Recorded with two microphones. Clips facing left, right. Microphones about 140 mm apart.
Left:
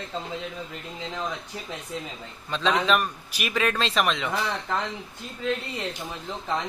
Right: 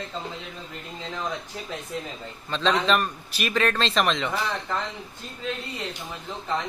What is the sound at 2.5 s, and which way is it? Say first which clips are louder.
A man's voice: even; 10° left (ahead or behind).